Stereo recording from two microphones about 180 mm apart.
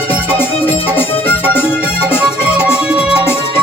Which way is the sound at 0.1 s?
10° left (ahead or behind).